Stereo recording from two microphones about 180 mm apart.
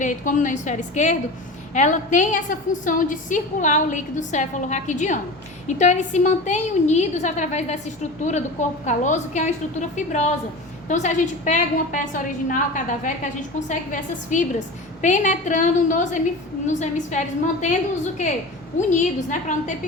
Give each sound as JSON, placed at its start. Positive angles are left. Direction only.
{"t": 0.0, "sound": "a woman's voice", "side_deg": 45}